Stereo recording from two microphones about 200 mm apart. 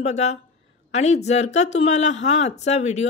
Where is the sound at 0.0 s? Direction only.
35° left (ahead or behind).